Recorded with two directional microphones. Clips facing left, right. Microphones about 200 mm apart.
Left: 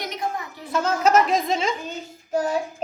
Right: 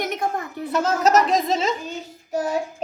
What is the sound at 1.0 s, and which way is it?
Speech, centre (ahead or behind).